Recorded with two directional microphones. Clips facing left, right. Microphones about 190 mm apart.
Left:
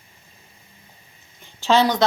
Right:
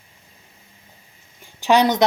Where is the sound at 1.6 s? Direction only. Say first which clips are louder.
Right 2 dB; 15° right (ahead or behind).